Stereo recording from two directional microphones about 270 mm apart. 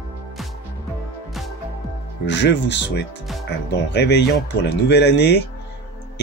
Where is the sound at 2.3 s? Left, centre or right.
Left.